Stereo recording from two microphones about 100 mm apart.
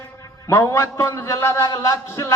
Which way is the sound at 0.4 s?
30° left (ahead or behind).